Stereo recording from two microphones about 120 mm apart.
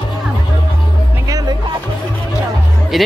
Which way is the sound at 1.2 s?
30° right (ahead or behind).